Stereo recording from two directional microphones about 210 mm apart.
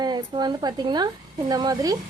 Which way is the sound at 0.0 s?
20° right (ahead or behind).